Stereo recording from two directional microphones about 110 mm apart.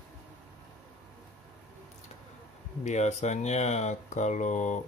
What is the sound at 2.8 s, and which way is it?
Speech, 90° left.